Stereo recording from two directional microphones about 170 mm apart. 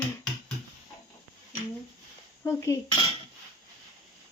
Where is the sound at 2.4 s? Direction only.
20° left (ahead or behind).